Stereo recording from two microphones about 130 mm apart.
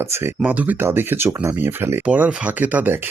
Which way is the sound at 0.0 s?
20° right (ahead or behind).